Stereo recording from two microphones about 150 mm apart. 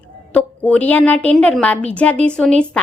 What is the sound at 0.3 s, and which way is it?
A woman's voice, 10° left (ahead or behind).